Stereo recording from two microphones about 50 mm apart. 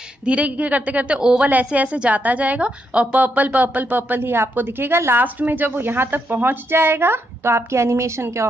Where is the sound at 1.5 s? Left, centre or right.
Right.